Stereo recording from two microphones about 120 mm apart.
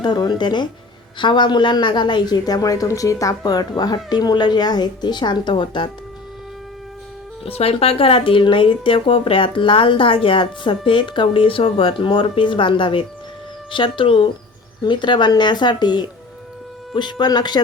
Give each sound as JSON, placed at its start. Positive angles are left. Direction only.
{"t": 0.0, "sound": "speech", "side_deg": 40}
{"t": 7.4, "sound": "speech", "side_deg": 55}